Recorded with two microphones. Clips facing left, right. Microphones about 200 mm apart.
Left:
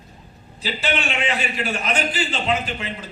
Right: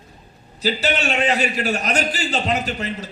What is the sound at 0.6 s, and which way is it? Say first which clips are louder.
A man's voice: right 4 dB; 40° right (ahead or behind).